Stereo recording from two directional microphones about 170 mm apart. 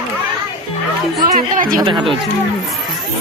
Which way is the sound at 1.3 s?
55° right (ahead or behind).